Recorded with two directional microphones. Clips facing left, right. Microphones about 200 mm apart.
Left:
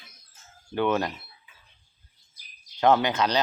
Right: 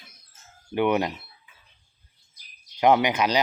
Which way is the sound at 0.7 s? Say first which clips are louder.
Right 2 dB; 15° right (ahead or behind).